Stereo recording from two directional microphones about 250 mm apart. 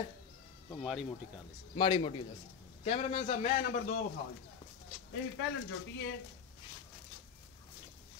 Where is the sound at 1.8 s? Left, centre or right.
Centre.